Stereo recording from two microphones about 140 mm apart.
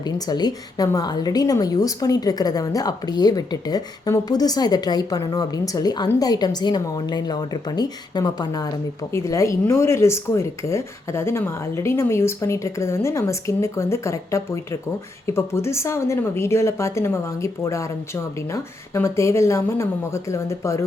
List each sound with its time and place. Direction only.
0.0 s a woman's voice: 30° left (ahead or behind)